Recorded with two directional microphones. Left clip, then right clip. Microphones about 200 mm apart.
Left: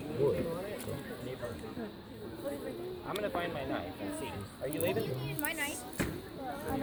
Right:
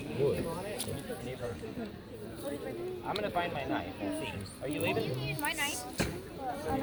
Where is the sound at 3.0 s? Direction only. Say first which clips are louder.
Right 2 dB; 50° left (ahead or behind).